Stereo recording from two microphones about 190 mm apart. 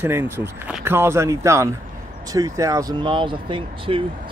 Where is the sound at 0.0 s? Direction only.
10° right (ahead or behind).